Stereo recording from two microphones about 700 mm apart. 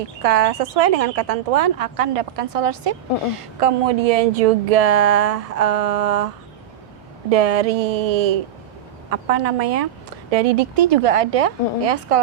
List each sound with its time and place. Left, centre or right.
0.2 s speech: right